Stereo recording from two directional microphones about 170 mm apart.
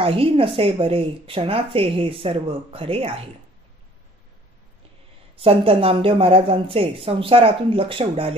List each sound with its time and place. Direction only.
0.0 s speech: 35° right (ahead or behind)
5.4 s speech: 35° right (ahead or behind)